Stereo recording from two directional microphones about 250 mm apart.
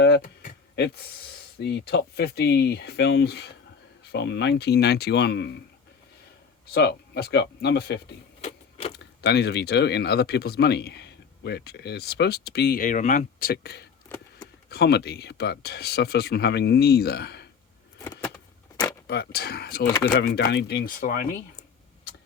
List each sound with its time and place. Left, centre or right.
0.0 s a sound: left
1.5 s speech: left
6.7 s speech: left
8.4 s a sound: left
9.0 s speech: left
18.0 s vehicle: centre
19.0 s speech: left